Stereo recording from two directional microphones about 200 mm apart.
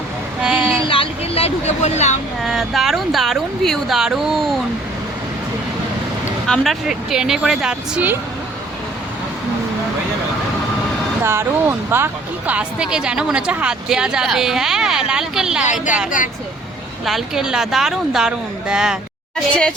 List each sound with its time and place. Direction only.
0.4 s child singing: centre (ahead or behind)
0.8 s speech: 25° left (ahead or behind)
2.4 s speech: centre (ahead or behind)
6.5 s speech: centre (ahead or behind)
11.2 s speech: 10° right (ahead or behind)
15.6 s speech: 40° left (ahead or behind)
17.1 s speech: centre (ahead or behind)